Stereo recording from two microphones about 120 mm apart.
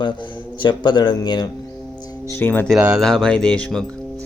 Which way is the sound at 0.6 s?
40° left (ahead or behind).